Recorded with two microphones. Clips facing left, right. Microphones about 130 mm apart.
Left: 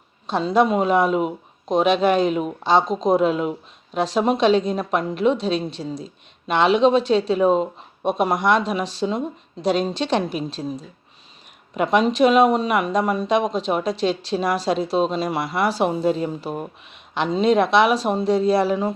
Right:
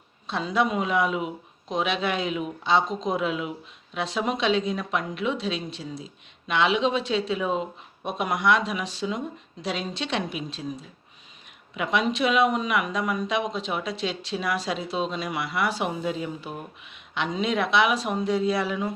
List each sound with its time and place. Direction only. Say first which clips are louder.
0.3 s speech: left 7 dB; 35° left (ahead or behind)